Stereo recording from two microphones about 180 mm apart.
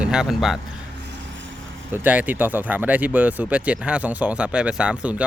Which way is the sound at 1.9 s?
10° right (ahead or behind).